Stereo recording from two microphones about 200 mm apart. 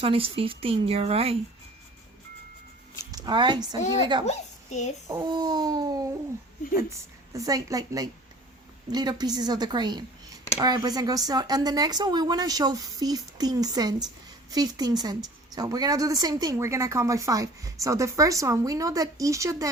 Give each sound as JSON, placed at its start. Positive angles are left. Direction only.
{"t": 0.0, "sound": "speech", "side_deg": -30}
{"t": 3.0, "sound": "speech", "side_deg": -20}
{"t": 4.3, "sound": "a woman's voice", "side_deg": 35}
{"t": 5.0, "sound": "speech", "side_deg": -15}
{"t": 7.3, "sound": "a woman's voice", "side_deg": -15}